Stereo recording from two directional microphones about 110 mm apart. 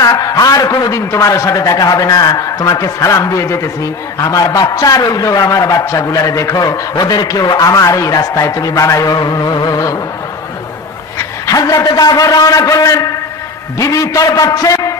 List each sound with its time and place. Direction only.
0.0 s a man's voice: 30° left (ahead or behind)
11.1 s a man's voice: 30° left (ahead or behind)